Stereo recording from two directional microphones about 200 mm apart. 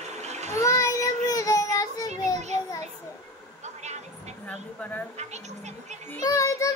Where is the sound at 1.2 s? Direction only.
15° left (ahead or behind).